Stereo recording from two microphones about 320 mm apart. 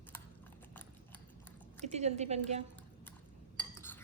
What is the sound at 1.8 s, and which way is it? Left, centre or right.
Speech, right.